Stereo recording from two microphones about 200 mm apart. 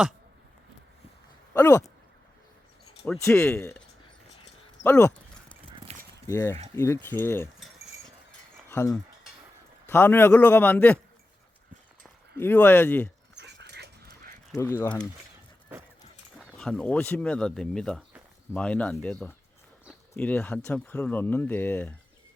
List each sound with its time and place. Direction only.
1.5 s speech: 15° left (ahead or behind)
3.1 s speech: 5° left (ahead or behind)
4.8 s clip-clop: 10° left (ahead or behind)
5.9 s keys jangling: 30° right (ahead or behind)
6.2 s speech: 15° left (ahead or behind)
8.7 s speech: 15° left (ahead or behind)
12.4 s speech: 10° left (ahead or behind)
13.3 s dog: 60° right (ahead or behind)
14.5 s speech: 15° left (ahead or behind)
16.4 s speech: centre (ahead or behind)